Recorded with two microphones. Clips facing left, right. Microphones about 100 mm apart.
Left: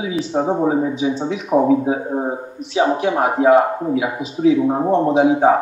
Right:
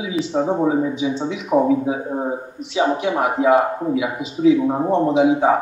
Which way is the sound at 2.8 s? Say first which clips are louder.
Left 2 dB; 30° left (ahead or behind).